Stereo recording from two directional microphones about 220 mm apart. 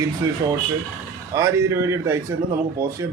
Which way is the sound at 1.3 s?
15° right (ahead or behind).